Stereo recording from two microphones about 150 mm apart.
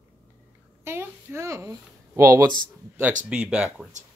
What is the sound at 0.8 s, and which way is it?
A woman's voice, 15° right (ahead or behind).